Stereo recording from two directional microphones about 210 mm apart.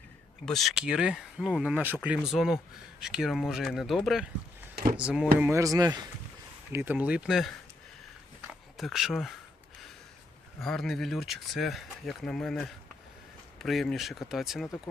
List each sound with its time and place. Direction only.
0.4 s speech: centre (ahead or behind)
4.7 s a sound: 45° right (ahead or behind)
4.9 s speech: 5° right (ahead or behind); by 6.1 s 20° right (ahead or behind)
6.7 s speech: 10° right (ahead or behind)
8.8 s speech: centre (ahead or behind)
10.6 s speech: centre (ahead or behind)